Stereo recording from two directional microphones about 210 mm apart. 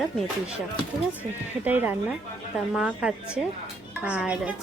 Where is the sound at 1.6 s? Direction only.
10° right (ahead or behind).